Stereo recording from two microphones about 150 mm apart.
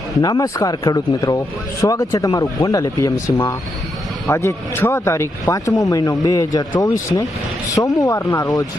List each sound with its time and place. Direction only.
0.2 s speech: 25° left (ahead or behind)